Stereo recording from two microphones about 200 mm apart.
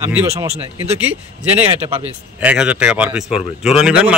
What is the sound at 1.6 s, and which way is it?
Speech, 30° right (ahead or behind).